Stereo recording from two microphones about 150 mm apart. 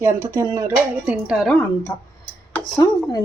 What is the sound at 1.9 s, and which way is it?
Speech, 25° left (ahead or behind).